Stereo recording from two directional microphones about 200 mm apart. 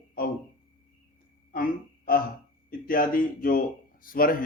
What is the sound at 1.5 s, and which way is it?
Music, 45° left (ahead or behind).